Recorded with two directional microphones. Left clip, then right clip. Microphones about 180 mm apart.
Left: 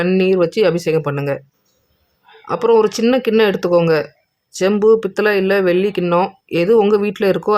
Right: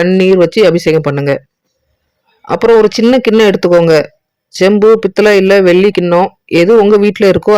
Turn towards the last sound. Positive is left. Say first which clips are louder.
# right 8 dB
turn(degrees=-30)  # may be behind; listen again after turning